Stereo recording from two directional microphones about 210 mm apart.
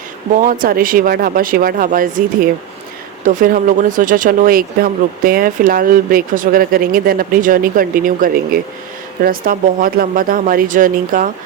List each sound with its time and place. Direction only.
0.3 s speech: 40° right (ahead or behind)